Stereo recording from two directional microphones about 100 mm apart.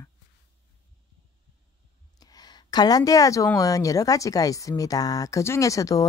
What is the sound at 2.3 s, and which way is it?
A woman's voice, 45° left (ahead or behind).